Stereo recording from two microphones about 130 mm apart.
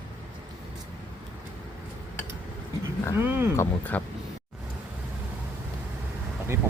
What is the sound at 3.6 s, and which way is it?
Speech, 15° left (ahead or behind).